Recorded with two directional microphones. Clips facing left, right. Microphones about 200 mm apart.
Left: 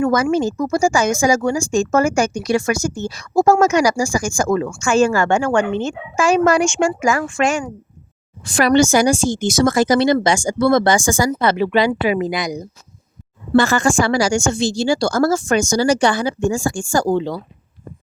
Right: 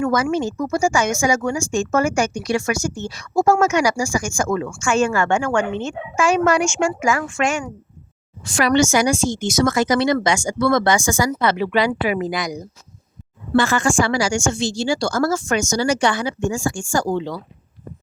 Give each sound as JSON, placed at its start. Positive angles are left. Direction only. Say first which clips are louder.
{"t": 0.0, "sound": "speech", "louder": "left 3 dB", "side_deg": 40}
{"t": 13.6, "sound": "speech", "louder": "left 2 dB", "side_deg": 40}